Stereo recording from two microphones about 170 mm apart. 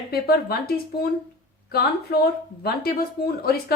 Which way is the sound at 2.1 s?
70° left (ahead or behind).